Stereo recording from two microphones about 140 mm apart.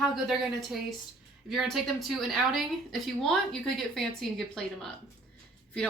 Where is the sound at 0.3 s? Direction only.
Centre (ahead or behind).